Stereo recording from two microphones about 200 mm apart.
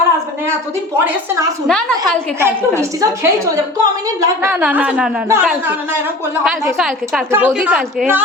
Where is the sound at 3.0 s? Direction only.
15° right (ahead or behind).